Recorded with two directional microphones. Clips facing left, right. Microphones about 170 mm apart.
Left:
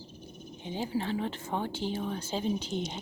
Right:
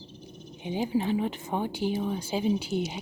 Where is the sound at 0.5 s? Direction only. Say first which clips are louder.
Right 5 dB; 15° right (ahead or behind).